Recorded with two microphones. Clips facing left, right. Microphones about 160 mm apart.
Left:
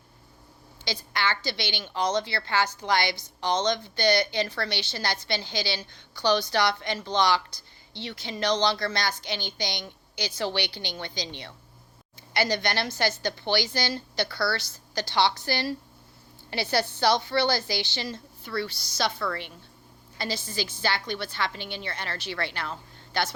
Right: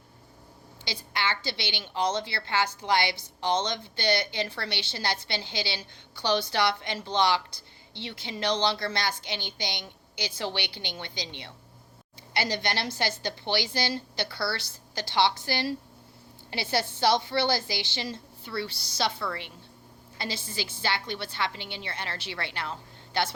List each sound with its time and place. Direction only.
0.9 s a woman's voice: 25° right (ahead or behind)
19.2 s a woman's voice: 20° right (ahead or behind)